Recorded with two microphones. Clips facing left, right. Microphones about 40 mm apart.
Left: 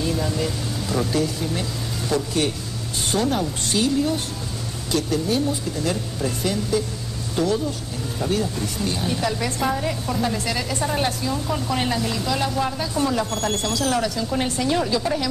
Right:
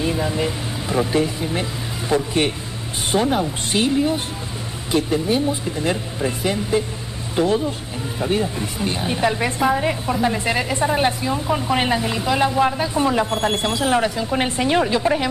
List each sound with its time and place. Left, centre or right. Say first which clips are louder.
0.0 s a woman's voice: right 3 dB; right